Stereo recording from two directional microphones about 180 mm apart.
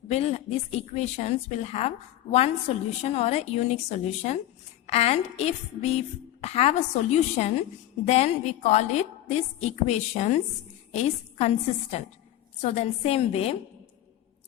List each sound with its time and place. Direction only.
0.1 s a woman's voice: 35° left (ahead or behind)